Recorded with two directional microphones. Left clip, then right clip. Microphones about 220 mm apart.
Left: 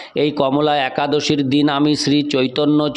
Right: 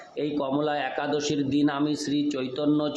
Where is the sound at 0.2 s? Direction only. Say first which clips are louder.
Left 11 dB; 40° left (ahead or behind).